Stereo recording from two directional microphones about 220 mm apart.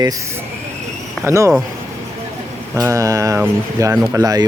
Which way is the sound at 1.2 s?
15° right (ahead or behind).